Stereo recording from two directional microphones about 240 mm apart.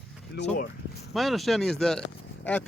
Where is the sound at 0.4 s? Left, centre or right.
Left.